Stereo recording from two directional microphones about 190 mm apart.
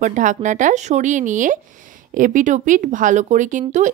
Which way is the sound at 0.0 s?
40° right (ahead or behind).